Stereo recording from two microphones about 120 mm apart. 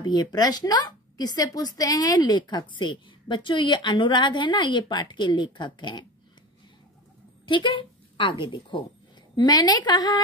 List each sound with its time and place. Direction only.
0.0 s a woman's voice: 35° left (ahead or behind)
7.4 s a woman's voice: 45° left (ahead or behind)